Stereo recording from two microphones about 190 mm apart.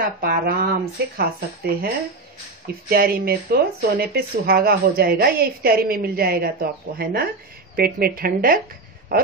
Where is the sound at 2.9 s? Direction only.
55° right (ahead or behind).